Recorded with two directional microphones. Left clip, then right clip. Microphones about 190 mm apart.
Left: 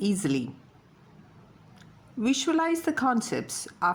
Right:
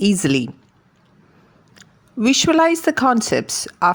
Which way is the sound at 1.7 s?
40° right (ahead or behind).